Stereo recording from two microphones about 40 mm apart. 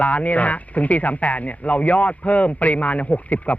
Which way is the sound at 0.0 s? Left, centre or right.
Left.